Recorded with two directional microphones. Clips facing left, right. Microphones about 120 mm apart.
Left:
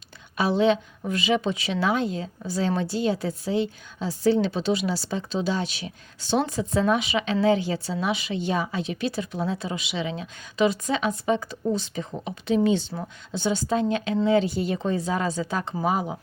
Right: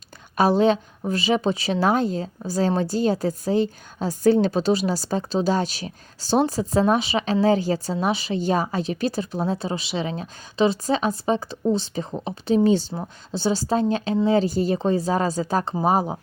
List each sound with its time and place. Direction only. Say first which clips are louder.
0.3 s a woman's voice: right 3 dB; 45° right (ahead or behind)